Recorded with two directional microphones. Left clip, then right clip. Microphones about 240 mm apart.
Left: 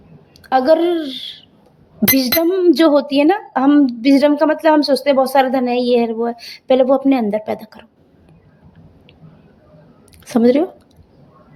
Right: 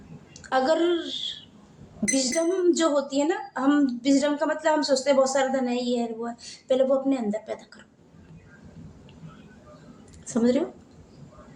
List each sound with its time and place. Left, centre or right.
0.4 s a woman's voice: left
10.2 s speech: left